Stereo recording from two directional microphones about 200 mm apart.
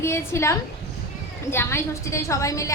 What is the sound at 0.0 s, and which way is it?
Speech, 15° left (ahead or behind).